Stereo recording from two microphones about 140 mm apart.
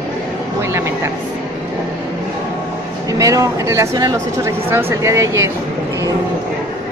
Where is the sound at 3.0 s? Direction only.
25° right (ahead or behind).